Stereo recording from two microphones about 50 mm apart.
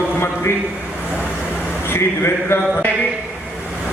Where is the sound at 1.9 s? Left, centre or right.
Left.